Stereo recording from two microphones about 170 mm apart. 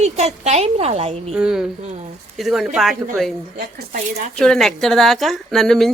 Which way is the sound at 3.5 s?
50° right (ahead or behind).